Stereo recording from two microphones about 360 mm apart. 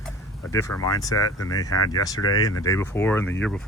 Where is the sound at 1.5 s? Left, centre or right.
Left.